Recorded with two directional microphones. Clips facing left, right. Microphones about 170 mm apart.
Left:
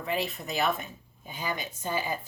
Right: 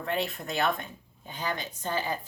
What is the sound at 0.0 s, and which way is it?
Speech, centre (ahead or behind).